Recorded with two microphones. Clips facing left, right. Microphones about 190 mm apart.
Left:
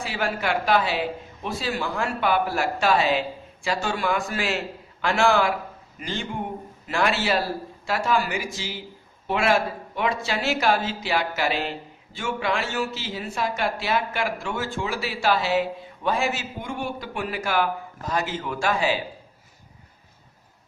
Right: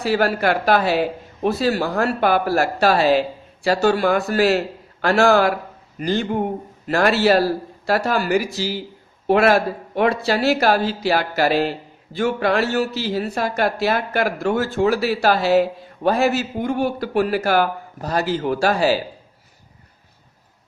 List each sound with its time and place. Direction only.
0.0 s speech: 40° right (ahead or behind)
9.4 s speech: 40° right (ahead or behind)